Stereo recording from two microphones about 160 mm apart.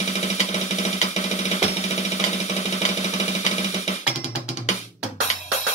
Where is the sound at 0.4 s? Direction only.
45° left (ahead or behind).